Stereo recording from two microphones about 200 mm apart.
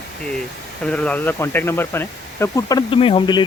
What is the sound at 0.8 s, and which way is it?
Speech, 5° left (ahead or behind).